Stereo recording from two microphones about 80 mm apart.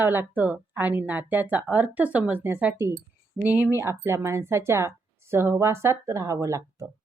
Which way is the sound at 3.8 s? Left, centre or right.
Right.